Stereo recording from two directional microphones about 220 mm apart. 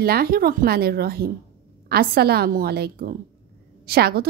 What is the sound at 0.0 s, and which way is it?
A woman's voice, 45° right (ahead or behind).